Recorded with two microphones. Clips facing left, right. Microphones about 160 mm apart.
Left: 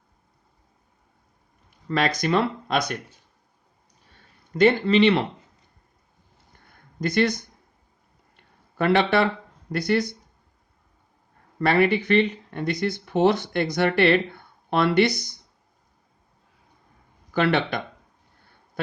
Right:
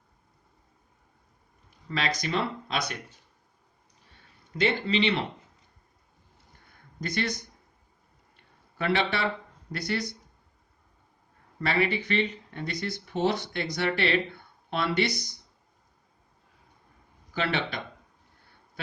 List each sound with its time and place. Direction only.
1.9 s speech: 55° left (ahead or behind)
4.5 s speech: 50° left (ahead or behind)
7.0 s speech: 60° left (ahead or behind)
8.8 s speech: 50° left (ahead or behind)
11.6 s speech: 55° left (ahead or behind)
17.3 s speech: 55° left (ahead or behind)